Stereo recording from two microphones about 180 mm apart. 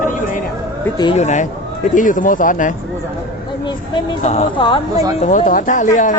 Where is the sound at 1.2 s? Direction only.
40° left (ahead or behind).